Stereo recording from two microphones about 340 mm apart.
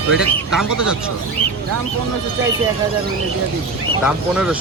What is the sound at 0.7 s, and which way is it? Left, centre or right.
Speech, right.